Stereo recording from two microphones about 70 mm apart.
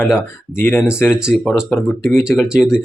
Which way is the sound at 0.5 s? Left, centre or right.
Left.